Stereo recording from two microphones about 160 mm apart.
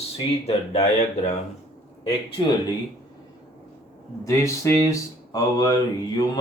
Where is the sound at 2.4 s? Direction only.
35° left (ahead or behind).